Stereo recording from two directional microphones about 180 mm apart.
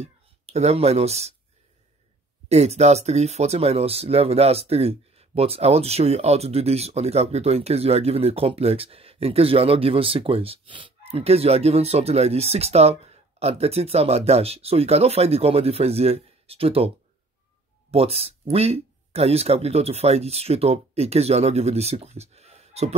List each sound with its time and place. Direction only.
0.0 s speech: 35° right (ahead or behind)
2.5 s speech: 35° right (ahead or behind)
17.9 s speech: 35° right (ahead or behind)